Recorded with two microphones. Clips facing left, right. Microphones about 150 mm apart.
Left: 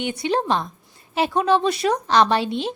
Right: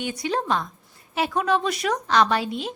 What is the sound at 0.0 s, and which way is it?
A woman's voice, 25° left (ahead or behind).